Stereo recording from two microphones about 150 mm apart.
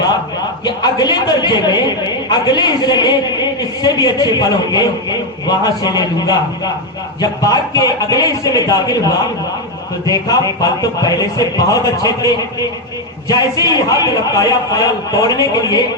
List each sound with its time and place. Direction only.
0.6 s a woman's voice: 30° left (ahead or behind)
13.7 s a woman's voice: 25° left (ahead or behind)